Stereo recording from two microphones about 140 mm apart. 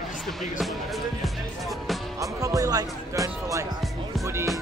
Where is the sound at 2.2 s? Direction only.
25° right (ahead or behind).